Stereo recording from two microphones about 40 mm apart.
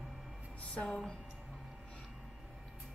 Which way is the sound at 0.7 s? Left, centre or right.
Left.